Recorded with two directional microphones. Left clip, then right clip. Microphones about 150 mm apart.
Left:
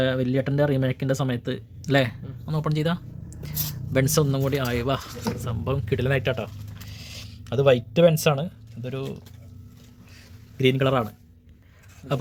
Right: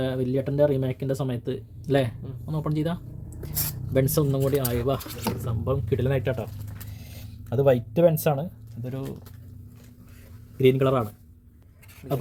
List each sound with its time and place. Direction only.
0.0 s speech: 30° left (ahead or behind); by 2.6 s 10° left (ahead or behind)
2.6 s speech: centre (ahead or behind)
10.6 s speech: centre (ahead or behind)